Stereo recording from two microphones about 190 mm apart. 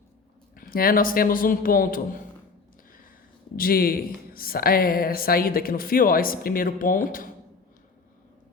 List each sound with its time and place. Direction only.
0.5 s speech: 50° left (ahead or behind)
3.5 s speech: 50° left (ahead or behind)